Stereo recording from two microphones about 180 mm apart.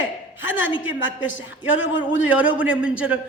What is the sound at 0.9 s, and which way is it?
Speech, 90° left.